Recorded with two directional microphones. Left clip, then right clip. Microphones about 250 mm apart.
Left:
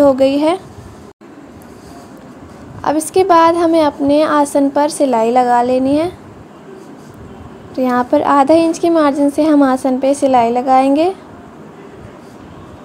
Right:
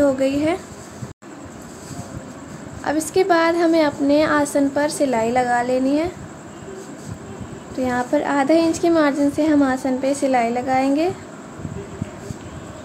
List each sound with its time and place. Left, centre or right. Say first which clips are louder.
0.0 s speech: left 7 dB; centre
2.8 s a woman's voice: left 6 dB; centre
7.7 s a woman's voice: left 7 dB; centre